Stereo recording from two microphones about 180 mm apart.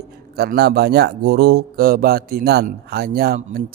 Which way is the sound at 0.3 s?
65° right (ahead or behind).